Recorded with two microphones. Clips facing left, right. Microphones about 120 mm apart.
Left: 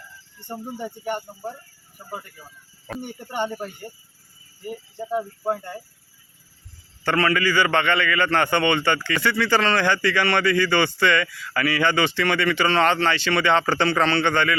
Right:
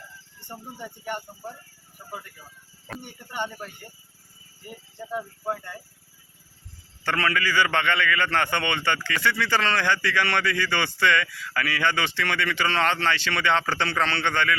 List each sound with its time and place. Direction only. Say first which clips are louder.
0.4 s speech: left 7 dB; 20° left (ahead or behind)
3.0 s speech: left 5 dB; 25° left (ahead or behind)
7.0 s a man's voice: left 5 dB; 5° left (ahead or behind)